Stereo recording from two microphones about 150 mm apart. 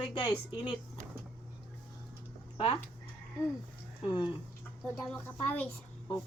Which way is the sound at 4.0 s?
30° left (ahead or behind).